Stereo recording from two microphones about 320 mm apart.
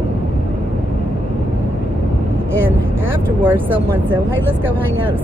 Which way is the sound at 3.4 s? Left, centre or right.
Centre.